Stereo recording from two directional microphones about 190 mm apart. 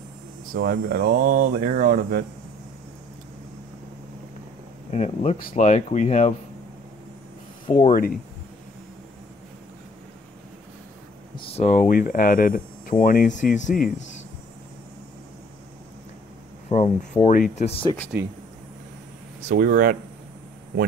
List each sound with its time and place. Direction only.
0.5 s speech: 50° right (ahead or behind)
4.9 s speech: 35° left (ahead or behind)
7.7 s speech: 45° left (ahead or behind)
11.3 s speech: 30° left (ahead or behind)
16.6 s speech: 35° left (ahead or behind)
19.4 s speech: 50° right (ahead or behind)